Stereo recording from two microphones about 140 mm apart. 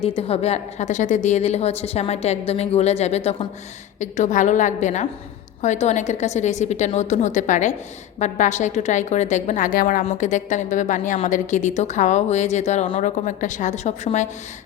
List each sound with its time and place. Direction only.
0.0 s a woman's voice: 45° left (ahead or behind)
4.0 s a woman's voice: 60° left (ahead or behind); by 10.0 s 80° left
10.0 s a woman's voice: 55° left (ahead or behind)